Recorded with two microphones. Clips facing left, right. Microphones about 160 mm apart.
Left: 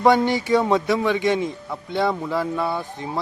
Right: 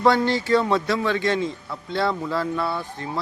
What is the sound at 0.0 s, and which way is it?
A man's voice, 15° left (ahead or behind).